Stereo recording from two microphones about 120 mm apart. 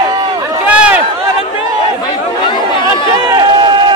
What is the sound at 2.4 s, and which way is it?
Chatter, 45° left (ahead or behind).